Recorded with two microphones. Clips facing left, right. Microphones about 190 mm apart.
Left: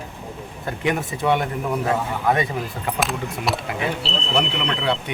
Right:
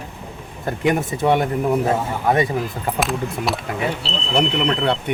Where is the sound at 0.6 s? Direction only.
45° right (ahead or behind).